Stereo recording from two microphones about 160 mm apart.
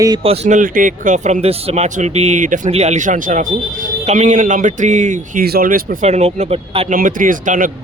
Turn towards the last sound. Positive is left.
turn(degrees=-55)  # may be behind; listen again after turning